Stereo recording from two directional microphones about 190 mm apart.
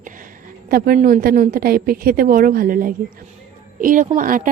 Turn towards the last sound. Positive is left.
turn(degrees=-45)  # may be behind; listen again after turning